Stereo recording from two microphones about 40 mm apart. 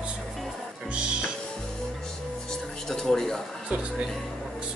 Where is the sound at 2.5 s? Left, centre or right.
Centre.